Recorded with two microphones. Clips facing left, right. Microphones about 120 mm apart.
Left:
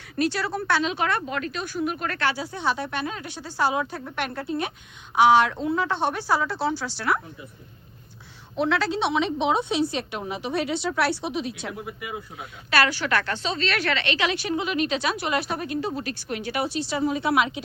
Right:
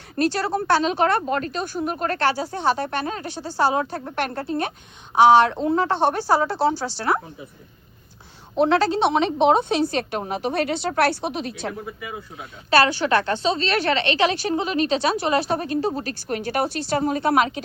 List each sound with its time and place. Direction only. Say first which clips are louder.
0.2 s speech: right 4 dB; 40° right (ahead or behind)
5.1 s speech: right 4 dB; 30° right (ahead or behind)
8.5 s a woman's voice: right 5 dB; 40° right (ahead or behind)
11.9 s speech: right 1 dB; 15° left (ahead or behind)
12.7 s a woman's voice: right 5 dB; 25° right (ahead or behind); by 17.6 s 45° right (ahead or behind)